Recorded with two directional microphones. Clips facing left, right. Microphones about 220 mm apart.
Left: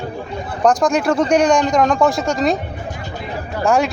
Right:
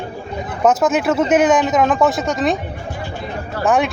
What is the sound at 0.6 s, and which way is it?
Speech, 5° right (ahead or behind).